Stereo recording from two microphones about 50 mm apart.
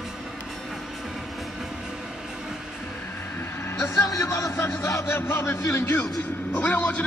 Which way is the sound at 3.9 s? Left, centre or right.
Left.